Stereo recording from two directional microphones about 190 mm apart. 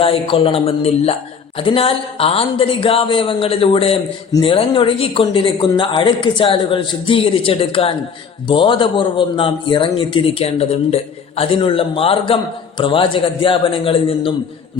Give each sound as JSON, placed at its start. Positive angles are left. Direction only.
{"t": 0.0, "sound": "a man's voice", "side_deg": 30}